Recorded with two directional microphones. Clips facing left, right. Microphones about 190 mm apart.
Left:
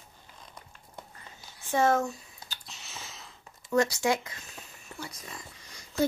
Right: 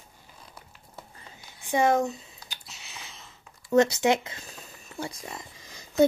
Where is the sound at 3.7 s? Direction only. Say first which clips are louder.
Right 5 dB; 25° right (ahead or behind).